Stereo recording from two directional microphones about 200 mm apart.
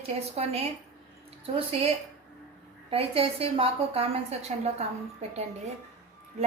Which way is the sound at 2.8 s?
30° right (ahead or behind).